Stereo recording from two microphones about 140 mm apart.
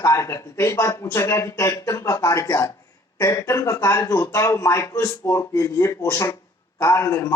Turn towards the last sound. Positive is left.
turn(degrees=20)  # may be behind; listen again after turning